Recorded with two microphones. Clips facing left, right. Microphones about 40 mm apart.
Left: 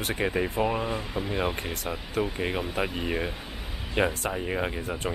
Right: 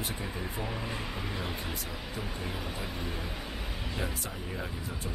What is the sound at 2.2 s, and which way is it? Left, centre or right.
Speech, left.